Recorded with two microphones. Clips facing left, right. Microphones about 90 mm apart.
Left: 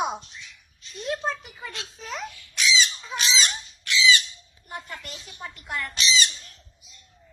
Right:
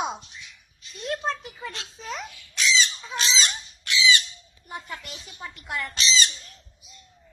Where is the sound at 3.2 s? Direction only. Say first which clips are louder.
Even; 35° right (ahead or behind).